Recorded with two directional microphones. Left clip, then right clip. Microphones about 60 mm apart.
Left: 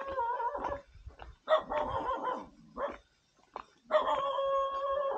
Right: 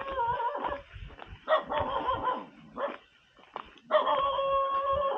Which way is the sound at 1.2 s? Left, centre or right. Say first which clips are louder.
Right 3 dB; left.